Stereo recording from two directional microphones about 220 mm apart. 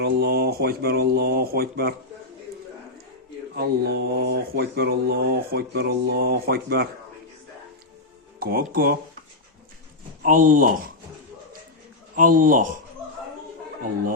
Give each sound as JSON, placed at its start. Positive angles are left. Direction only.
{"t": 0.0, "sound": "speech", "side_deg": -45}
{"t": 3.5, "sound": "speech", "side_deg": -45}
{"t": 8.4, "sound": "speech", "side_deg": -40}
{"t": 10.2, "sound": "speech", "side_deg": -35}
{"t": 12.1, "sound": "speech", "side_deg": -40}